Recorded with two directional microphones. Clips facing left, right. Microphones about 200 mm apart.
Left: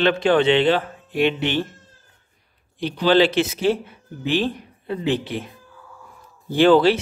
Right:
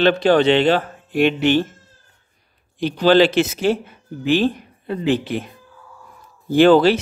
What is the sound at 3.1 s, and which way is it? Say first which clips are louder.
Speech: right 3 dB; 45° right (ahead or behind).